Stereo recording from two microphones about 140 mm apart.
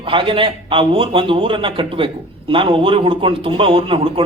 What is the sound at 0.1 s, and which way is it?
Speech, 40° right (ahead or behind).